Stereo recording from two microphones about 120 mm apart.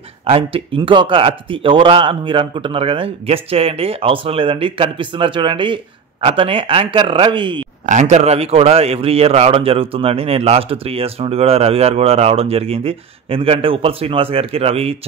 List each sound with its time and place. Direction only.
0.3 s speech: 50° right (ahead or behind)
7.8 s a man's voice: 85° right; by 15.0 s 55° right (ahead or behind)